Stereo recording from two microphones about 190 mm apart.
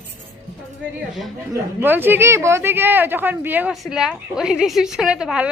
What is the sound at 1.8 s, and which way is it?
Speech, 10° right (ahead or behind).